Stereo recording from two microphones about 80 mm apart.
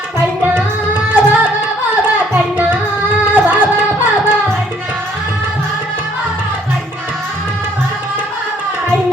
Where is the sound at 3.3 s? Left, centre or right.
Right.